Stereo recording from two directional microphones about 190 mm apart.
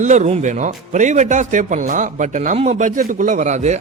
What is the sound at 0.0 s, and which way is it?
Speech, 40° right (ahead or behind).